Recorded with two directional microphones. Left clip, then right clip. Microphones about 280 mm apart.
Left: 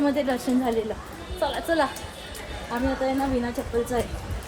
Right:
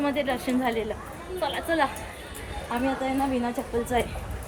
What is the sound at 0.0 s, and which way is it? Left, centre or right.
Speech, centre.